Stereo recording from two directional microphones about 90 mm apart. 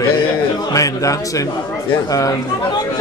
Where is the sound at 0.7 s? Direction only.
40° left (ahead or behind).